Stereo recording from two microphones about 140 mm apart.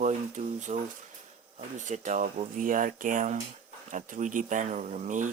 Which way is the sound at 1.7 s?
60° right (ahead or behind).